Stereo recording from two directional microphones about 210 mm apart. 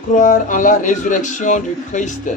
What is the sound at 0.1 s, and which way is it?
A man's voice, 40° left (ahead or behind).